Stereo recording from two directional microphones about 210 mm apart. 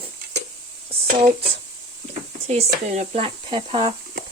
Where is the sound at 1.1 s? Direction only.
45° right (ahead or behind).